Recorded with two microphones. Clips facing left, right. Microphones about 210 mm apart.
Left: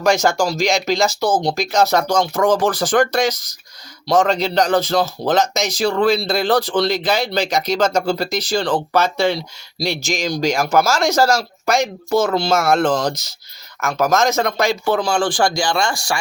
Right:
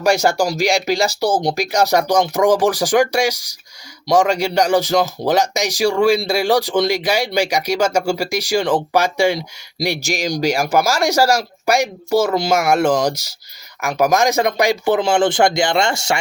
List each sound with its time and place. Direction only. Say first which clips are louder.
0.0 s a man's voice: even; 10° right (ahead or behind)